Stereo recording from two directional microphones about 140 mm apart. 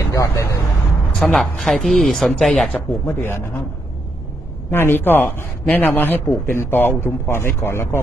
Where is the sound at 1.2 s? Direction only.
5° left (ahead or behind).